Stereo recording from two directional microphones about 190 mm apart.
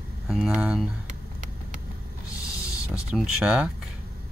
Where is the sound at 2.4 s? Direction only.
15° left (ahead or behind).